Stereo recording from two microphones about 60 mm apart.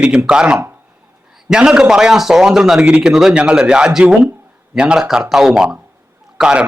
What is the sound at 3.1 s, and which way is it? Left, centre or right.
A man's voice, centre.